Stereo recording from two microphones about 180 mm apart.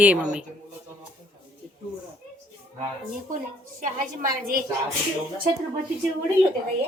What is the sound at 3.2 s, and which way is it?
A woman's voice, 50° right (ahead or behind).